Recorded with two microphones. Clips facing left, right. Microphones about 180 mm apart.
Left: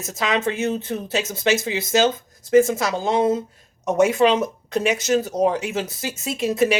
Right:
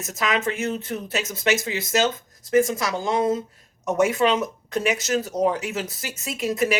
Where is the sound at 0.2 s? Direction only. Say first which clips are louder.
Left 2 dB; 25° left (ahead or behind).